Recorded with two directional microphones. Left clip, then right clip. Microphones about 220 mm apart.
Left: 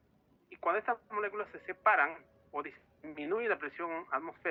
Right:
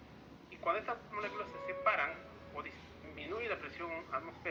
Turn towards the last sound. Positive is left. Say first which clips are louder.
# left 4 dB
turn(degrees=30)  # may be behind; listen again after turning